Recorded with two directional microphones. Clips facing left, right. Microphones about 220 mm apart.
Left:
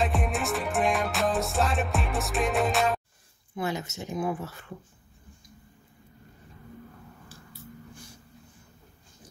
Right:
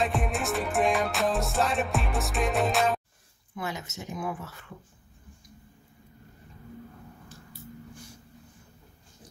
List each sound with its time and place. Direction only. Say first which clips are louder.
0.0 s music: even; centre (ahead or behind)
3.5 s speech: left 4 dB; 30° left (ahead or behind)